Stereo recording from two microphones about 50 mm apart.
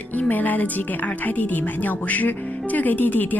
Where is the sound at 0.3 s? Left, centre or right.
Left.